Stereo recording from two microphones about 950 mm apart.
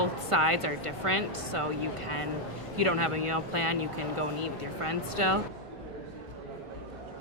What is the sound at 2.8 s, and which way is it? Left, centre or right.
A woman's voice, right.